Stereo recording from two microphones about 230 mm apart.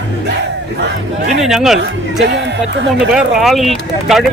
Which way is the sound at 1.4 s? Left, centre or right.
Centre.